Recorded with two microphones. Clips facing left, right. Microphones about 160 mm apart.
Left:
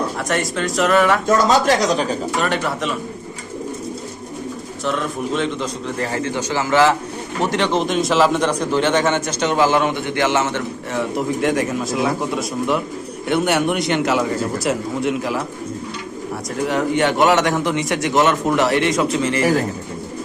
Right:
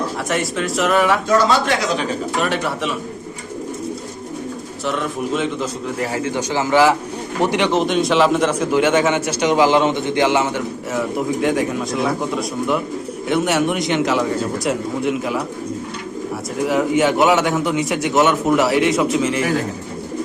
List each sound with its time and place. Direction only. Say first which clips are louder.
0.3 s a man's voice: right 1 dB; centre (ahead or behind)
1.5 s speech: left 2 dB; 40° left (ahead or behind)
2.3 s a man's voice: even; centre (ahead or behind)
4.9 s a man's voice: even; 5° right (ahead or behind)
7.8 s a man's voice: even; centre (ahead or behind); by 10.6 s 15° right (ahead or behind)
10.9 s a man's voice: even; centre (ahead or behind)
16.6 s a man's voice: right 2 dB; 5° right (ahead or behind)